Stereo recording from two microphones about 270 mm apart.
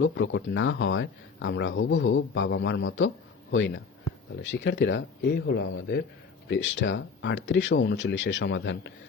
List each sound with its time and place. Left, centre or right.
0.0 s speech: left